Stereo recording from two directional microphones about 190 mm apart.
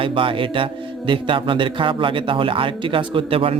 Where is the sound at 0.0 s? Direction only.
25° right (ahead or behind).